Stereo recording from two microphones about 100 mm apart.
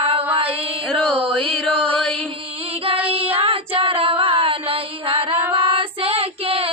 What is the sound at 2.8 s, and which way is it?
Child singing, 70° right (ahead or behind).